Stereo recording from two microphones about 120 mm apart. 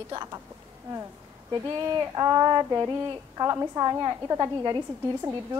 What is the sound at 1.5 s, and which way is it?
A woman's voice, 25° right (ahead or behind).